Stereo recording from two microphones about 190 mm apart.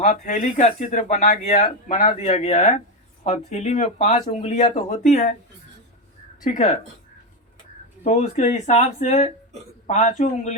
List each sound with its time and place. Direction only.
0.0 s speech: 40° left (ahead or behind)
6.5 s speech: 45° left (ahead or behind)
8.0 s speech: 40° left (ahead or behind)